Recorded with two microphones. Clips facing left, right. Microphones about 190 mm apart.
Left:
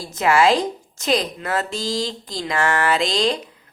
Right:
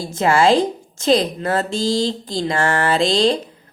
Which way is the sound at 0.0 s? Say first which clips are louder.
Right 2 dB; 30° right (ahead or behind).